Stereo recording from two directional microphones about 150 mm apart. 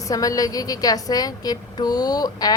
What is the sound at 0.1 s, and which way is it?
A woman's voice, 25° left (ahead or behind).